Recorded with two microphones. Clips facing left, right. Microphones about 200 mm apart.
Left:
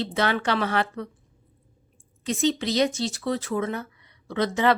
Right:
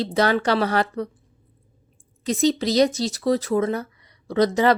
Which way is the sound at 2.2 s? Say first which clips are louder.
Right 4 dB; 35° right (ahead or behind).